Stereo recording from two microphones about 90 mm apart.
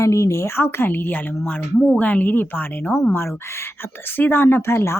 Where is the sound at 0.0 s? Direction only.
35° left (ahead or behind).